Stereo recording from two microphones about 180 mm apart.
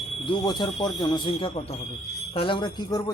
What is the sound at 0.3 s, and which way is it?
Speech, 25° left (ahead or behind).